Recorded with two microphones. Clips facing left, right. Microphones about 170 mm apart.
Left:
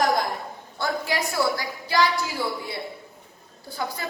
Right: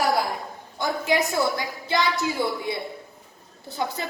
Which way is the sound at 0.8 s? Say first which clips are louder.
Right 3 dB; 20° right (ahead or behind).